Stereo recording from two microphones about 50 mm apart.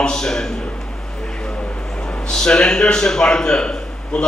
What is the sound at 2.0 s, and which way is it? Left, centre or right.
A man's voice, centre.